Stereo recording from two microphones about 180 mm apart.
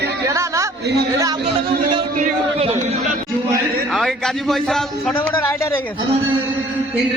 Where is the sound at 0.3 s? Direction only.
15° right (ahead or behind).